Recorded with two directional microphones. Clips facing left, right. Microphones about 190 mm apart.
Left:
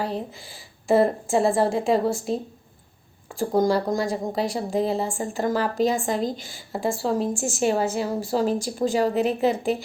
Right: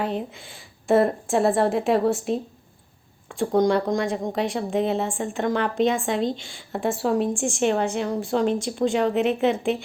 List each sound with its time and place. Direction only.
0.0 s a woman's voice: centre (ahead or behind)